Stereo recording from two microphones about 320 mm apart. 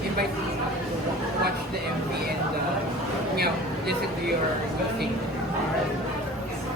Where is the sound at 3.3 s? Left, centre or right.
Right.